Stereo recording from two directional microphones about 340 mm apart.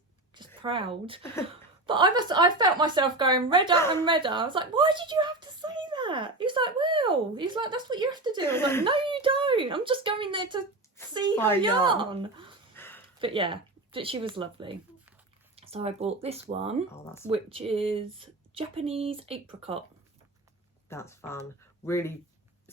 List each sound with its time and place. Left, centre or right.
0.3 s a woman's voice: centre
8.4 s speech: centre
8.8 s a woman's voice: centre
12.7 s a sound: centre
13.1 s a woman's voice: centre
20.9 s speech: centre